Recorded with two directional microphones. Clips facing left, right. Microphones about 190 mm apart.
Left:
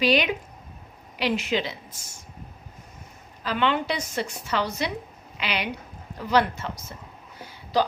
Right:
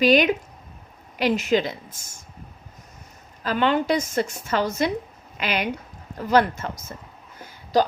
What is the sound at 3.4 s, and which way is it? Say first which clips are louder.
A woman's voice: right 3 dB; 45° right (ahead or behind).